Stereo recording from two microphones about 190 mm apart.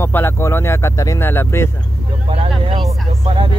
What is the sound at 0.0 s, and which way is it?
Speech, 10° left (ahead or behind).